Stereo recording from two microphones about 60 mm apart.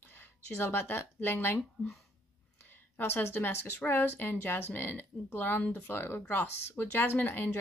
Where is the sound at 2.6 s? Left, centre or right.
Left.